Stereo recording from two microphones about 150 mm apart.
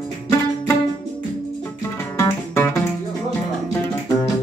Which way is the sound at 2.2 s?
15° left (ahead or behind).